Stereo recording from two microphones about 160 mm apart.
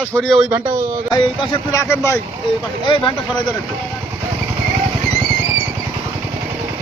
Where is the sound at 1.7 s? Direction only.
20° left (ahead or behind).